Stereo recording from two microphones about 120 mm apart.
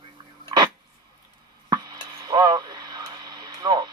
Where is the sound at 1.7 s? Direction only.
35° right (ahead or behind).